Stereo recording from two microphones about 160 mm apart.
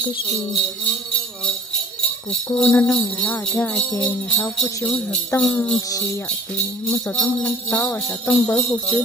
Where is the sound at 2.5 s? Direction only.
10° left (ahead or behind).